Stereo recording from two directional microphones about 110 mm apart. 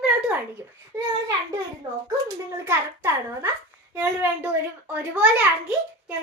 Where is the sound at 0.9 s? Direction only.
20° right (ahead or behind).